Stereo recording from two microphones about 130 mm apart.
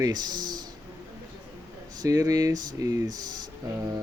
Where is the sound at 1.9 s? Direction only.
30° right (ahead or behind).